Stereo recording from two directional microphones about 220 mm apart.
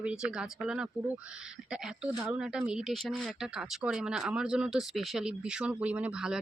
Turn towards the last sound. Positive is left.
turn(degrees=-5)  # may be behind; listen again after turning